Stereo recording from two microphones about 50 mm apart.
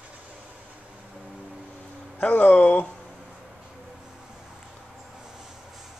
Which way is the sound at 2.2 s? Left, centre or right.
Left.